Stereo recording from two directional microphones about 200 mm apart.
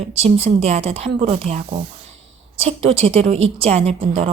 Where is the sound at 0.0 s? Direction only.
30° right (ahead or behind).